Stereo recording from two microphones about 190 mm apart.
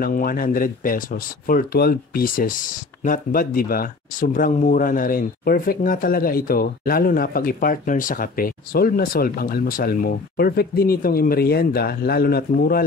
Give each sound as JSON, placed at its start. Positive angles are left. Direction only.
{"t": 0.0, "sound": "speech", "side_deg": 50}